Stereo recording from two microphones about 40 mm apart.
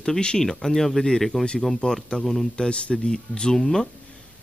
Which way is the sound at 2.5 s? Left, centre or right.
Left.